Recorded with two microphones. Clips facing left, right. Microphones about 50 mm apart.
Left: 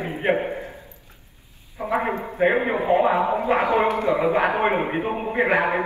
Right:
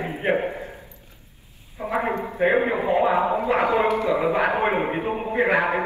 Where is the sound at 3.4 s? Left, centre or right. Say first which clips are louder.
Left 1 dB; left.